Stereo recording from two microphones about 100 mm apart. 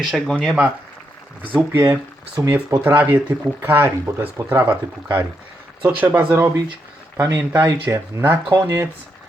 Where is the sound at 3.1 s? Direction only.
20° right (ahead or behind).